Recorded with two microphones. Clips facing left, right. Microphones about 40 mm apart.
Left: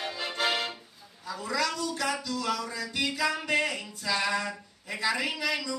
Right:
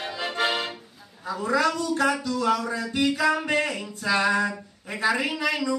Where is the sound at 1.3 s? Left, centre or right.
Right.